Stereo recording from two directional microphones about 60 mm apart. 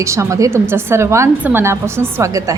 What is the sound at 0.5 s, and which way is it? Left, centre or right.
A woman's voice, right.